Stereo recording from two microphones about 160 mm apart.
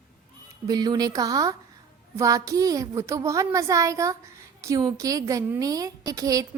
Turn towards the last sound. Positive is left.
turn(degrees=-20)  # may be behind; listen again after turning